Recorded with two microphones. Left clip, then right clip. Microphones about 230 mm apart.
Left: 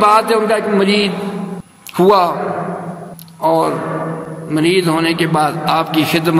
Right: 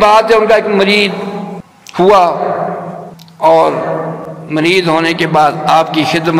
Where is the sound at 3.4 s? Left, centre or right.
Left.